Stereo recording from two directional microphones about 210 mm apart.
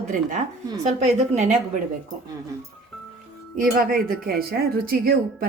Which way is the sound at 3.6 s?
40° right (ahead or behind).